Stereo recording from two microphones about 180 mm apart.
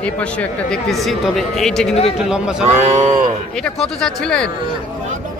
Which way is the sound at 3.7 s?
5° left (ahead or behind).